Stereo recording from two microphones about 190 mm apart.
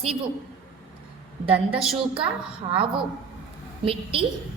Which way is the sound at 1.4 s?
30° right (ahead or behind).